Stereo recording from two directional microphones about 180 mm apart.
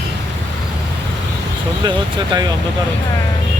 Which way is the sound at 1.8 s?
25° right (ahead or behind).